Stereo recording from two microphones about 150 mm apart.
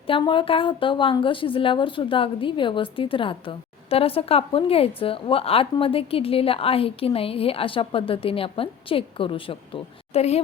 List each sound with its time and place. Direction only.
0.1 s a woman's voice: 35° left (ahead or behind)